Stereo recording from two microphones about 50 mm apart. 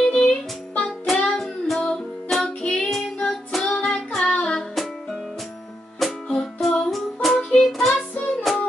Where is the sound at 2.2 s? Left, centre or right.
Centre.